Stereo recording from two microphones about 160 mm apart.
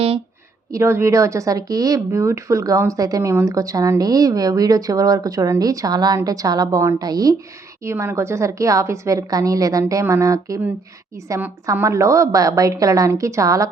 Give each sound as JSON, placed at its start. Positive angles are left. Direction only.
{"t": 0.7, "sound": "speech", "side_deg": -15}